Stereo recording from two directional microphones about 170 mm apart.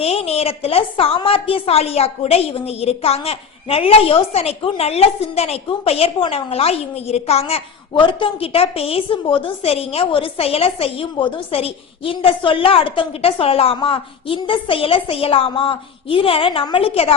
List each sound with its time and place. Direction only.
0.0 s a woman's voice: 35° left (ahead or behind)